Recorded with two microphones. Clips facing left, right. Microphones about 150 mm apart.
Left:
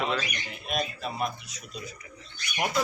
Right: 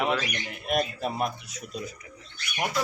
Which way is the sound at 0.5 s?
55° right (ahead or behind).